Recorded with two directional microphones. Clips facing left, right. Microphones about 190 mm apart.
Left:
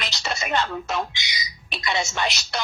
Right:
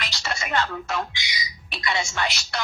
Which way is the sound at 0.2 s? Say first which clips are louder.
Left 1 dB; 20° left (ahead or behind).